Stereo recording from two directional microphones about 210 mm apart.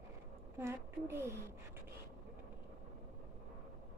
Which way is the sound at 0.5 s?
10° right (ahead or behind).